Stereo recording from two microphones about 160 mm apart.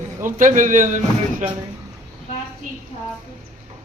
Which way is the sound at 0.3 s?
55° right (ahead or behind).